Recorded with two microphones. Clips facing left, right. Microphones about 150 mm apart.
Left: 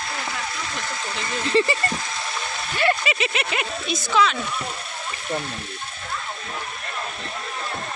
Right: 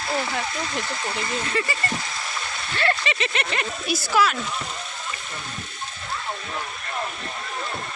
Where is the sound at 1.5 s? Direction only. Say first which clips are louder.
Left 10 dB; 25° left (ahead or behind).